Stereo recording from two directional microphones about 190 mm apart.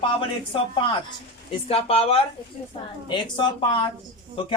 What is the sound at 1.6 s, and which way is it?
Speech, 30° left (ahead or behind).